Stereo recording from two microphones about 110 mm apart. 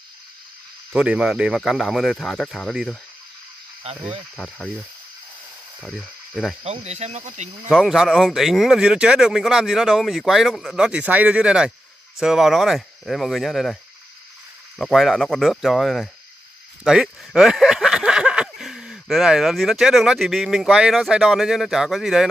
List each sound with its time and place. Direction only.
0.9 s speech: 5° right (ahead or behind)
4.4 s speech: 5° left (ahead or behind)
5.8 s speech: centre (ahead or behind)
6.6 s speech: 75° right (ahead or behind)
7.7 s speech: centre (ahead or behind)
10.9 s speech: 15° right (ahead or behind); by 13.7 s centre (ahead or behind)
14.8 s speech: centre (ahead or behind)